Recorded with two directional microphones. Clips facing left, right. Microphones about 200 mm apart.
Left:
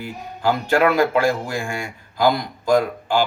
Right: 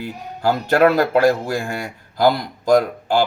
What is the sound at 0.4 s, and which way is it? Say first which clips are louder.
A man's voice: right 2 dB; 40° right (ahead or behind).